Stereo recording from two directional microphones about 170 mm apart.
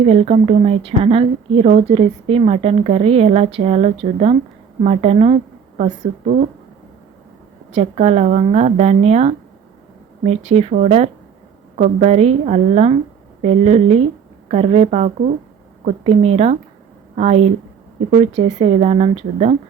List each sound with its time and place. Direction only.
0.0 s speech: 35° right (ahead or behind)
7.8 s speech: 40° right (ahead or behind)